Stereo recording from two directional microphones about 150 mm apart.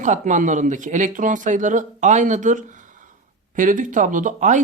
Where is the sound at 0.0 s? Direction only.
55° right (ahead or behind).